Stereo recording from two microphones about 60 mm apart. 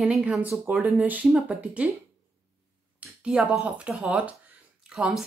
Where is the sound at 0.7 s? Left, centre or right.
Right.